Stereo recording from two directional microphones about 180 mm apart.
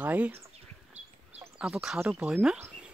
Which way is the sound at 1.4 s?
5° right (ahead or behind).